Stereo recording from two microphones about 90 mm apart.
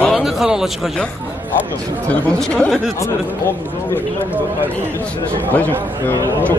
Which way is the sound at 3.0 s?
30° left (ahead or behind).